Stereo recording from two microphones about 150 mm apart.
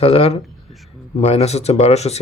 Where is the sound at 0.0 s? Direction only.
40° left (ahead or behind).